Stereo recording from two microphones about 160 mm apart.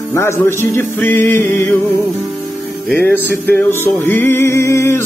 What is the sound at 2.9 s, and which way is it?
Music, 10° left (ahead or behind).